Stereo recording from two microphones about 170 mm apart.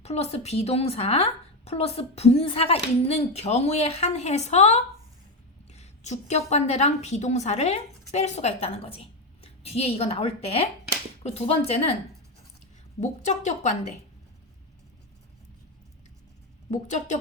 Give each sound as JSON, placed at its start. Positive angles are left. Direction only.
{"t": 0.0, "sound": "a woman's voice", "side_deg": 40}
{"t": 13.0, "sound": "a woman's voice", "side_deg": 45}
{"t": 16.7, "sound": "a woman's voice", "side_deg": 45}